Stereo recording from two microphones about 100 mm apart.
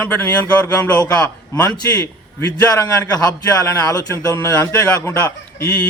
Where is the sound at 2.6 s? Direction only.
30° left (ahead or behind).